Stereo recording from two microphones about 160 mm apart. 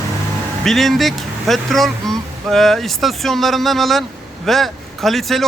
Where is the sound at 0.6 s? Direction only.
Centre (ahead or behind).